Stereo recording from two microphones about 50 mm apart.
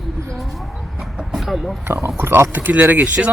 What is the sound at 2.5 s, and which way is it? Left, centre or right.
Speech, right.